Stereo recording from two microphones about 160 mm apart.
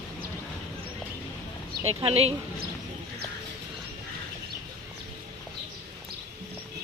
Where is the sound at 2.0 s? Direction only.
35° right (ahead or behind).